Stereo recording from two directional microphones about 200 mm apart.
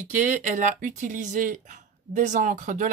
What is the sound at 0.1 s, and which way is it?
Speech, 40° right (ahead or behind).